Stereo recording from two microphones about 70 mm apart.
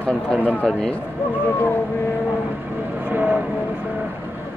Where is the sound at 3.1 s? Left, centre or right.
Centre.